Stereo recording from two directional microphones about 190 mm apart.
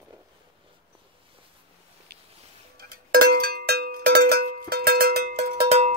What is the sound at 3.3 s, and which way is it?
Cowbell, 55° right (ahead or behind).